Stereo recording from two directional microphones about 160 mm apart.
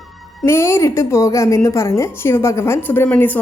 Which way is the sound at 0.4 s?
15° left (ahead or behind).